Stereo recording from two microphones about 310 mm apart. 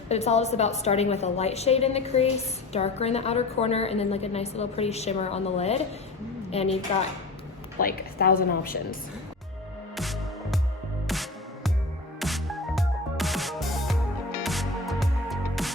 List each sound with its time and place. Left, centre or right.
0.1 s a woman's voice: left
7.8 s a woman's voice: left
9.9 s music: centre